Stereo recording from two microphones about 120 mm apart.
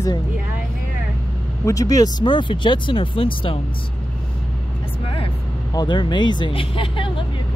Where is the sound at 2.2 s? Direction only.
40° left (ahead or behind).